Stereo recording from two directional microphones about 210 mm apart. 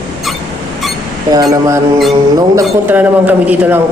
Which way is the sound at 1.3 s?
15° right (ahead or behind).